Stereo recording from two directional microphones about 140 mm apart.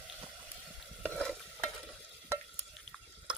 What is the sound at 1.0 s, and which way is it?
Stir, 5° left (ahead or behind).